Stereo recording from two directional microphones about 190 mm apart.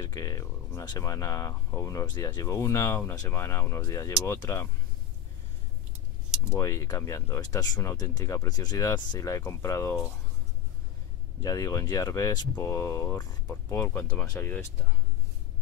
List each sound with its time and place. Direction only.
0.0 s speech: 20° left (ahead or behind)
6.5 s speech: 15° left (ahead or behind)
11.4 s speech: 20° left (ahead or behind)